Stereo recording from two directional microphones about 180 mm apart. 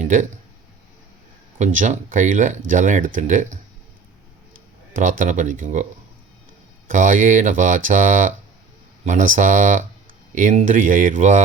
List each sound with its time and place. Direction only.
0.0 s speech: 40° right (ahead or behind)
1.5 s speech: 45° right (ahead or behind)
4.9 s speech: 45° right (ahead or behind)
6.8 s speech: 45° right (ahead or behind)